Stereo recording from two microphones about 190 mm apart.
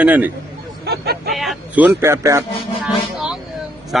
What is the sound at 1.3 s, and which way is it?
A man's voice, centre (ahead or behind).